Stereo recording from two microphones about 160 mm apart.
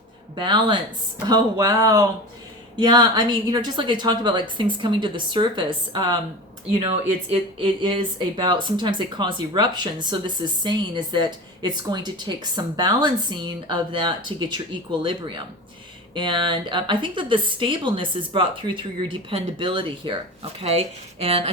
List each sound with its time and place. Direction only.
0.3 s a woman's voice: 30° right (ahead or behind)